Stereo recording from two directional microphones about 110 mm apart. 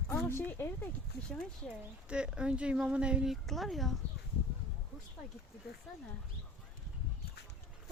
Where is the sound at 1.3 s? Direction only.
5° left (ahead or behind).